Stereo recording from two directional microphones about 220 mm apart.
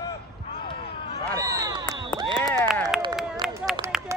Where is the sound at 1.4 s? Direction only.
15° right (ahead or behind).